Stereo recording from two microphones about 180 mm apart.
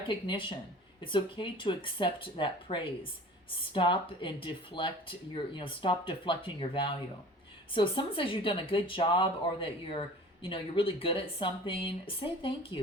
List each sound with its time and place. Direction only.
0.1 s speech: 25° left (ahead or behind)